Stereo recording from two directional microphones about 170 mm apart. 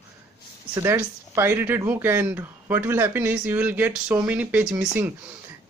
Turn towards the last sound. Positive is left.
turn(degrees=-10)  # may be behind; listen again after turning